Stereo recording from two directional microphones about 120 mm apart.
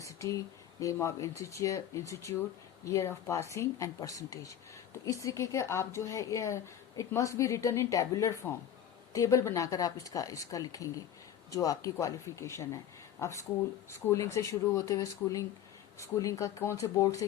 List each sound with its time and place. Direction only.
0.0 s speech: 25° left (ahead or behind)